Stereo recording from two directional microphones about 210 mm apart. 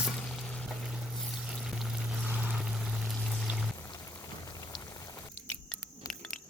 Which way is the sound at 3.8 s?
15° left (ahead or behind).